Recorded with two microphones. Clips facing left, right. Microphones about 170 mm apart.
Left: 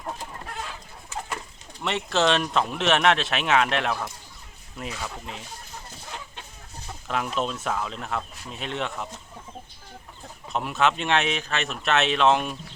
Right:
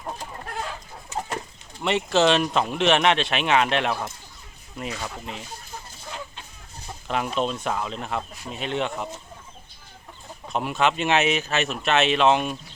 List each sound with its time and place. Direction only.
1.8 s speech: centre (ahead or behind)
7.1 s speech: centre (ahead or behind)
10.5 s speech: centre (ahead or behind)